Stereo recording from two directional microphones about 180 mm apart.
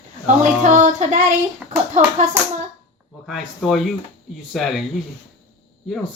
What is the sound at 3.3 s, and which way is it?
Speech, centre (ahead or behind).